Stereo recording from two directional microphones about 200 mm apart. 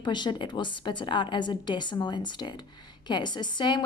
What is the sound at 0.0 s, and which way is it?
A woman's voice, 20° left (ahead or behind).